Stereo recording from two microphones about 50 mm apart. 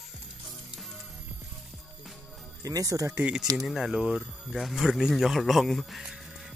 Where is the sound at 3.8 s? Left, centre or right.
Centre.